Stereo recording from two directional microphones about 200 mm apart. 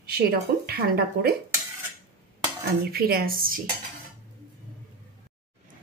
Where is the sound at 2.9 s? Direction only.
50° right (ahead or behind).